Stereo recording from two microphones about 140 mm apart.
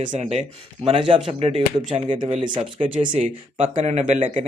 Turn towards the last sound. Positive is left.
turn(degrees=-50)  # may be behind; listen again after turning